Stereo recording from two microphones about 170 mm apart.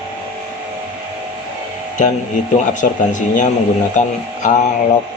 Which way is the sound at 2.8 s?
50° left (ahead or behind).